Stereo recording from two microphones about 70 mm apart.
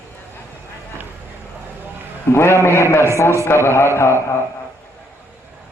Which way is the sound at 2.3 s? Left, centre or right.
Left.